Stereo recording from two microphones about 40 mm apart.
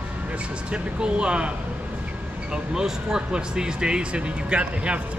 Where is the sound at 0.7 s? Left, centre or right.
Right.